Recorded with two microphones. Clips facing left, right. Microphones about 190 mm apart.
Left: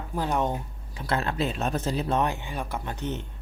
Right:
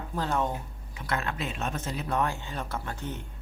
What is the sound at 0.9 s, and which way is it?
Speech, 30° left (ahead or behind).